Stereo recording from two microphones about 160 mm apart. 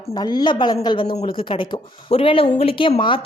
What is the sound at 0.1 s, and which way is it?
A woman's voice, 25° left (ahead or behind).